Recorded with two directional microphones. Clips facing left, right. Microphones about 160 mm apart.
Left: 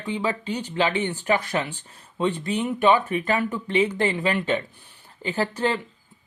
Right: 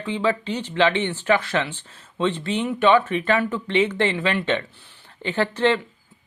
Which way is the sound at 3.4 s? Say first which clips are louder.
Right 1 dB; 15° left (ahead or behind).